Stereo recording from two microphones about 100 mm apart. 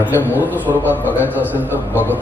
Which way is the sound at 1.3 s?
15° right (ahead or behind).